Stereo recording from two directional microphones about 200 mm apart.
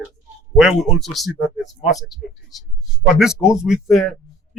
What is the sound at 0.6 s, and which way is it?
Speech, centre (ahead or behind).